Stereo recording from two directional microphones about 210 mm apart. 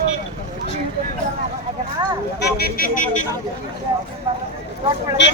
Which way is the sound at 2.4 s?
50° left (ahead or behind).